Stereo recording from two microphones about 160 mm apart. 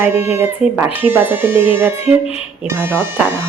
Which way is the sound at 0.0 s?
15° right (ahead or behind).